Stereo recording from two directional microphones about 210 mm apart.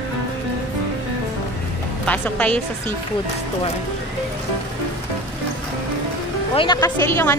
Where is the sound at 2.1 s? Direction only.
5° left (ahead or behind).